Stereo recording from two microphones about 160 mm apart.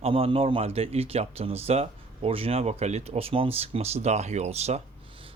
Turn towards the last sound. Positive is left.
turn(degrees=-40)  # may be behind; listen again after turning